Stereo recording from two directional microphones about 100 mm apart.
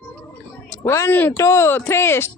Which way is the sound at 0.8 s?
30° left (ahead or behind).